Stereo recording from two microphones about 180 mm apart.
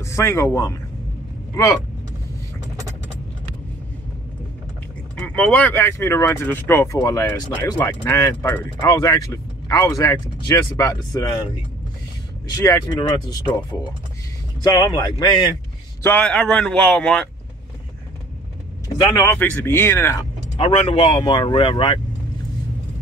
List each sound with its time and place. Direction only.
0.0 s speech: 15° left (ahead or behind)
5.1 s speech: 5° left (ahead or behind)
12.4 s speech: 15° left (ahead or behind)
14.6 s speech: 25° left (ahead or behind)
16.0 s a man's voice: 10° left (ahead or behind)
18.9 s speech: 20° left (ahead or behind)
20.5 s speech: 30° left (ahead or behind)